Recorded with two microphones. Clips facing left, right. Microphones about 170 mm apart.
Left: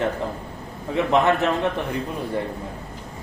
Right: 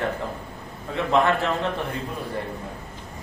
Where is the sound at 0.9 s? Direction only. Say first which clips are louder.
Left 2 dB; 20° left (ahead or behind).